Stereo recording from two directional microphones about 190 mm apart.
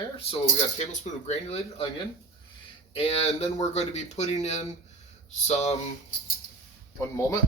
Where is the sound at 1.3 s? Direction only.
35° left (ahead or behind).